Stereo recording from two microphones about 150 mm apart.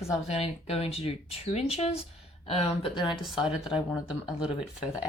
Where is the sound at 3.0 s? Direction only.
Centre (ahead or behind).